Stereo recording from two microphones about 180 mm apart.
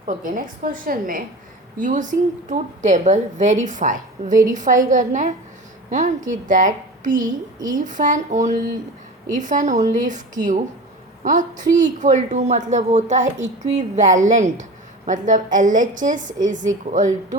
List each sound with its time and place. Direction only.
0.0 s speech: 45° right (ahead or behind)